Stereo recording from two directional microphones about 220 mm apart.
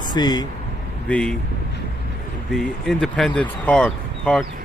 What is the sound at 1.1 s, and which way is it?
Speech, 5° left (ahead or behind).